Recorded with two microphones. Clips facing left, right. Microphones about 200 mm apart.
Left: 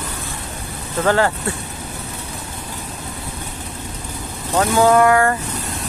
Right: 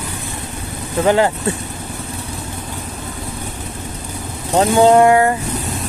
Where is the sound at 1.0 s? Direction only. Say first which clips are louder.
Right 3 dB; 20° right (ahead or behind).